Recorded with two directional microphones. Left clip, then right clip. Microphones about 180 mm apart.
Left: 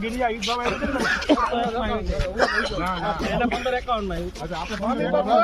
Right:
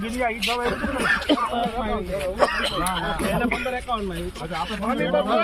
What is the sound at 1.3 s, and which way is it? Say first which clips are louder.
Speech: left 1 dB; 15° left (ahead or behind).